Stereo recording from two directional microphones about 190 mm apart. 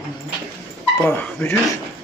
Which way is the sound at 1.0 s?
10° left (ahead or behind).